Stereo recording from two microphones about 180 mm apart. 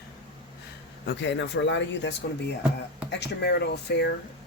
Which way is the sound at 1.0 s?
85° left.